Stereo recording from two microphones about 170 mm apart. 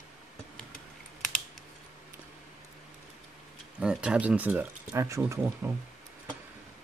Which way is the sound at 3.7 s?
5° right (ahead or behind).